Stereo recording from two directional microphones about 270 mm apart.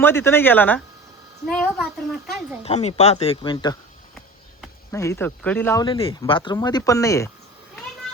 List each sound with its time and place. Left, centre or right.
0.0 s a child's voice: centre
2.6 s speech: left
4.9 s speech: centre